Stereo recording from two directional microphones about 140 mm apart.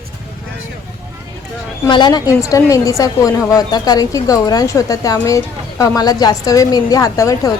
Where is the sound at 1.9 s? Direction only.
30° left (ahead or behind).